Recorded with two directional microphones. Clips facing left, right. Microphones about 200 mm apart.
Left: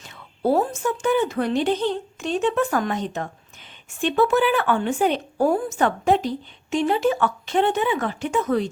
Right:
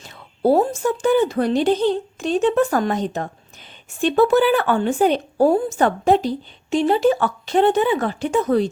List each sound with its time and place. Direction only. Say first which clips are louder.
0.0 s a woman's voice: right 4 dB; 35° right (ahead or behind)